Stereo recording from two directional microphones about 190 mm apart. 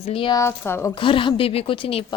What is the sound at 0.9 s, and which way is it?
A woman's voice, 25° left (ahead or behind).